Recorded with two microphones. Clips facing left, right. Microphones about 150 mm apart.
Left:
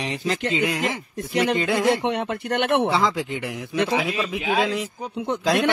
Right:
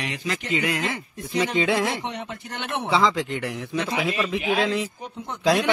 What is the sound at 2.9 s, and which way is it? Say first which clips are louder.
Speech: right 1 dB; 5° left (ahead or behind).